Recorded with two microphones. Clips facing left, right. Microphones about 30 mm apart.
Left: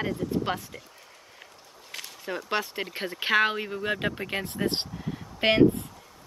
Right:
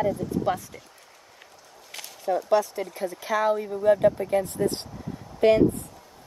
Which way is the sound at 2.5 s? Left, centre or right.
Left.